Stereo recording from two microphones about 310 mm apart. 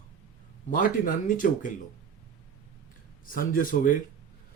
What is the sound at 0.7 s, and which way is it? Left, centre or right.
Speech, left.